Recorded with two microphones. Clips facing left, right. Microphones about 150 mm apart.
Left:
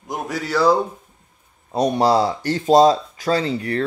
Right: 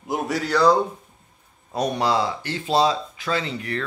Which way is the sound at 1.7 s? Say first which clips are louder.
Left 5 dB; 30° left (ahead or behind).